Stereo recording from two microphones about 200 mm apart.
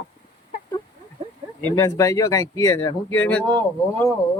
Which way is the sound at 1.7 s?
15° left (ahead or behind).